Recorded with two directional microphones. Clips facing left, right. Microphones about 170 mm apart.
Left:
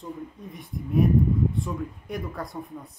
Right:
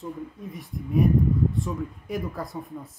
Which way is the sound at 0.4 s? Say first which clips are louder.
Right 1 dB; centre (ahead or behind).